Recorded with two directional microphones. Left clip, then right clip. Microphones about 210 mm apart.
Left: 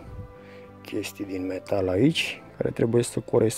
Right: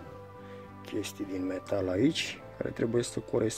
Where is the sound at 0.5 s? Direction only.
30° left (ahead or behind).